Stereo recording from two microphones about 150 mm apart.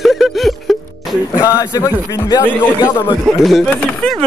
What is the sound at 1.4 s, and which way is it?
A man's voice, 20° left (ahead or behind).